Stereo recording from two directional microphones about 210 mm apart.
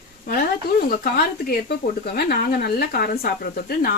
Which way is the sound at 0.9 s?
45° left (ahead or behind).